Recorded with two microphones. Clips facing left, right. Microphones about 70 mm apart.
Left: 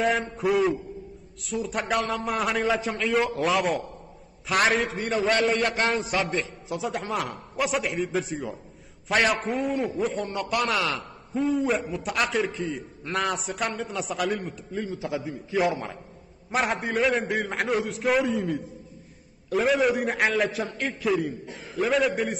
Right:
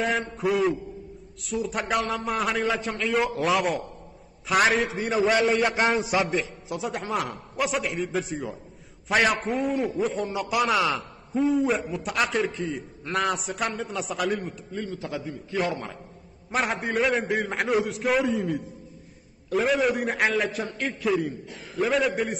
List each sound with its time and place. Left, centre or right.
0.0 s a man's voice: centre
5.8 s a man's voice: centre
6.2 s a man's voice: centre